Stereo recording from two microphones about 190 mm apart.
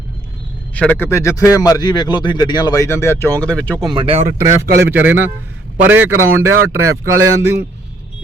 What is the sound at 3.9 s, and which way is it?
Speech, 30° right (ahead or behind).